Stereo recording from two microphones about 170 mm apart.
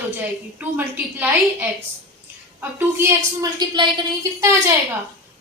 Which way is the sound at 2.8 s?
15° right (ahead or behind).